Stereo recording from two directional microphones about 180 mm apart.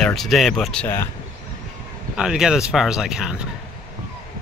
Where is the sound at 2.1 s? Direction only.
5° right (ahead or behind).